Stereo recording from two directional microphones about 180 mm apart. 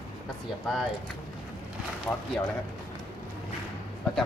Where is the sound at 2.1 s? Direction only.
10° left (ahead or behind).